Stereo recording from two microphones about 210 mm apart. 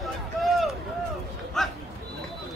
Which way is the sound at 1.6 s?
Centre (ahead or behind).